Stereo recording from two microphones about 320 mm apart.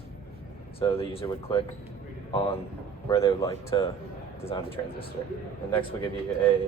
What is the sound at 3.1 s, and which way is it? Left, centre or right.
Speech, centre.